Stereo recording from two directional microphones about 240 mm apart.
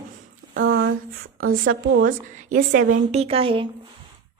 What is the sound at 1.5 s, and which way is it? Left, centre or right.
Speech, right.